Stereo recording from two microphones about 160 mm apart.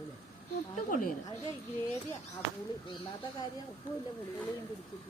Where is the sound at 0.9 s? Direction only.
55° left (ahead or behind).